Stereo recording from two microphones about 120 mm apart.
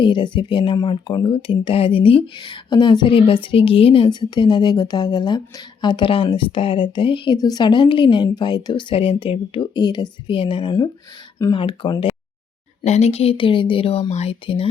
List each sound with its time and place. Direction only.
0.0 s speech: 40° left (ahead or behind)
2.4 s a woman's voice: 35° left (ahead or behind)
7.3 s a woman's voice: 30° left (ahead or behind)
12.8 s speech: 65° left (ahead or behind)
14.1 s speech: 65° left (ahead or behind)
14.4 s speech: 45° left (ahead or behind)